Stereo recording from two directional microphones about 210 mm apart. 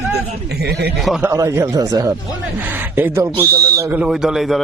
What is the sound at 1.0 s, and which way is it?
Speech, centre (ahead or behind).